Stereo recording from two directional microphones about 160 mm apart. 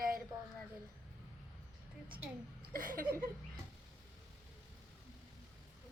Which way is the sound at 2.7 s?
60° right (ahead or behind).